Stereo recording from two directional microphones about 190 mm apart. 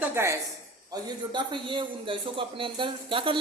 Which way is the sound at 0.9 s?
20° right (ahead or behind).